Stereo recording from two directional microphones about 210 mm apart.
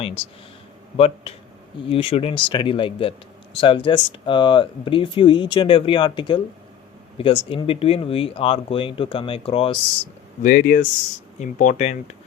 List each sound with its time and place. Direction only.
0.0 s speech: 30° left (ahead or behind)
10.4 s speech: 40° left (ahead or behind)